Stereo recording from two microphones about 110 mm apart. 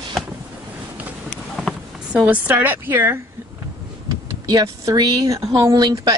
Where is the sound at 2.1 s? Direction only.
10° right (ahead or behind).